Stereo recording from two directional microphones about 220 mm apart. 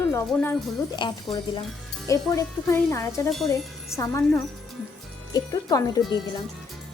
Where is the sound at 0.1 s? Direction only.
10° left (ahead or behind).